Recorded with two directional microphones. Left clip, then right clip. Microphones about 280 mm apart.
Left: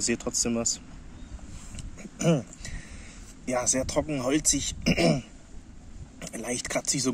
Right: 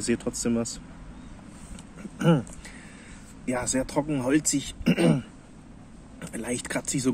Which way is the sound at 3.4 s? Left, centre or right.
Centre.